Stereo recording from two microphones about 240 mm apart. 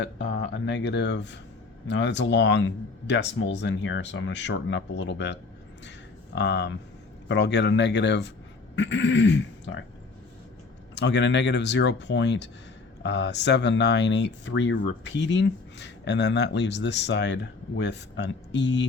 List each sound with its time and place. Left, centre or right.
0.0 s speech: left
10.9 s speech: left